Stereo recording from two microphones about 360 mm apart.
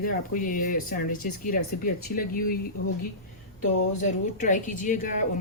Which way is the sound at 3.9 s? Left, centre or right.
Left.